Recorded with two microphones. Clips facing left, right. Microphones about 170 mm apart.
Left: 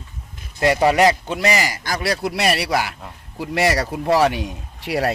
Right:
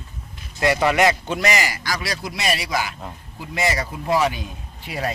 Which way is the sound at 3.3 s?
80° left.